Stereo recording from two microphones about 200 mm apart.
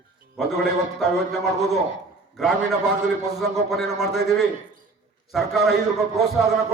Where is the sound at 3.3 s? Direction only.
Centre (ahead or behind).